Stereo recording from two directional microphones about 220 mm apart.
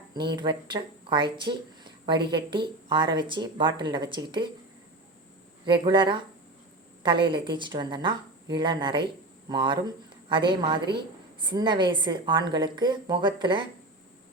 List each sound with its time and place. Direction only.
0.1 s a woman's voice: 20° right (ahead or behind)
5.6 s a woman's voice: 20° right (ahead or behind)